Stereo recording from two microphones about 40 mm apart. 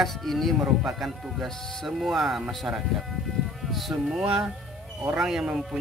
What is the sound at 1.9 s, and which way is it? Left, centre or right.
Speech, centre.